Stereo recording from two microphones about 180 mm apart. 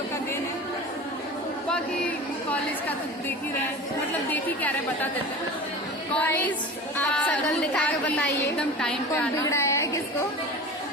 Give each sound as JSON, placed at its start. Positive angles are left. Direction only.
{"t": 1.7, "sound": "chatter", "side_deg": 10}
{"t": 4.3, "sound": "a woman's voice", "side_deg": 10}
{"t": 6.1, "sound": "a woman's voice", "side_deg": 10}
{"t": 9.3, "sound": "a woman's voice", "side_deg": 15}